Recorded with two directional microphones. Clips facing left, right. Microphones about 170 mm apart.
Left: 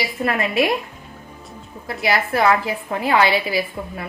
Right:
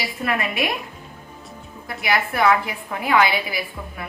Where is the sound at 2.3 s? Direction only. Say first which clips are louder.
Left 1 dB; 30° left (ahead or behind).